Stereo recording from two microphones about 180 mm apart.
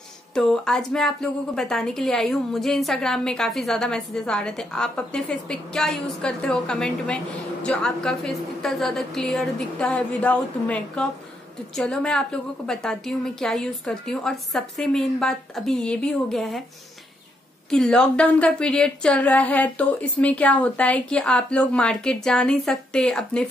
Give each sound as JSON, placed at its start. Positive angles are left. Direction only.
{"t": 0.3, "sound": "a woman's voice", "side_deg": 5}
{"t": 17.6, "sound": "a woman's voice", "side_deg": 5}